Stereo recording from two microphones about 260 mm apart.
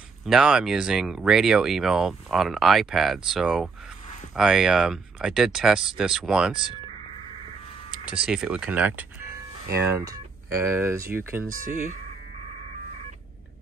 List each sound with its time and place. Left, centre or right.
0.2 s speech: centre
8.0 s speech: centre
11.5 s speech: right